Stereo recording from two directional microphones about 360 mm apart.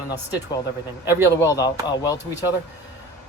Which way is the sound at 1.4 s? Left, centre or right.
Centre.